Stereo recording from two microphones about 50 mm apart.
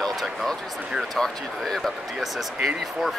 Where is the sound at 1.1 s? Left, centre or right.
Centre.